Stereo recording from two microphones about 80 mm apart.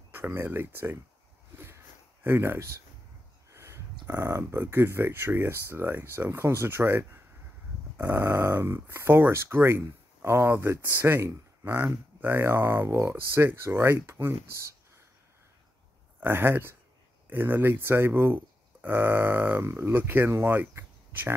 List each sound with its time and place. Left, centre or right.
0.1 s speech: right
2.2 s speech: right
3.5 s a sound: right
4.1 s speech: right
16.2 s speech: right